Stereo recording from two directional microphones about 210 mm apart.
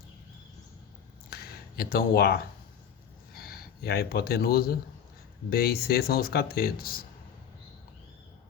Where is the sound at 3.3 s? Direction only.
45° left (ahead or behind).